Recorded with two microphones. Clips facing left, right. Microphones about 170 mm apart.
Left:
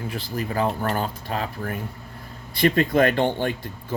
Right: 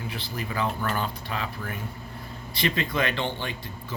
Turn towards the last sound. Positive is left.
turn(degrees=50)  # may be behind; listen again after turning